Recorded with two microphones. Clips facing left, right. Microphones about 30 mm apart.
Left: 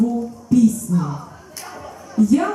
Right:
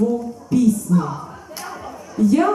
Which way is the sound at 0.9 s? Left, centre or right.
Centre.